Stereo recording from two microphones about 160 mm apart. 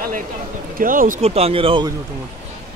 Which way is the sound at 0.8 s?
60° right (ahead or behind).